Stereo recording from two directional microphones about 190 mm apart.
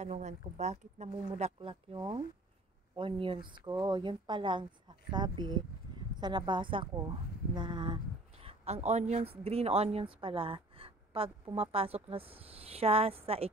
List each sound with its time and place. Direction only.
0.0 s speech: 35° right (ahead or behind)